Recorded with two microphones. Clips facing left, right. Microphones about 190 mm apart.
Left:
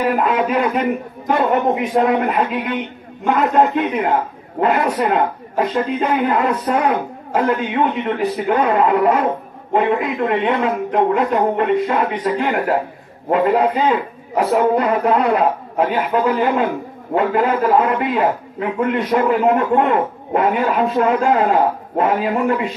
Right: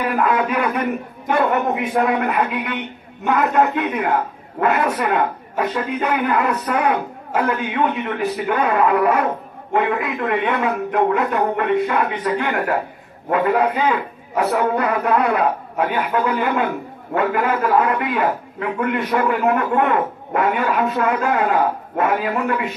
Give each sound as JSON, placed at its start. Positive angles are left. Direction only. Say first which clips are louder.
{"t": 0.0, "sound": "a man's voice", "louder": "left 2 dB", "side_deg": 25}